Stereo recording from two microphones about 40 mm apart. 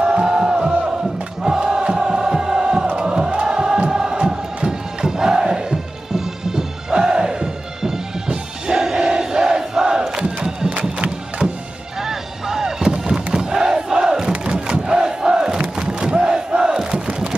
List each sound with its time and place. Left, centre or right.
0.0 s crowd: right
1.4 s music: centre
10.7 s music: right
12.0 s battle cry: centre
14.4 s crowd: centre
15.6 s battle cry: centre